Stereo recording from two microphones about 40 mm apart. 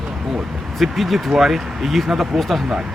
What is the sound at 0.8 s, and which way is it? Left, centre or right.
Speech, centre.